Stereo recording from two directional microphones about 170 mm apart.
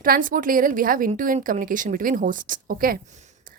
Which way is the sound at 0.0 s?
55° right (ahead or behind).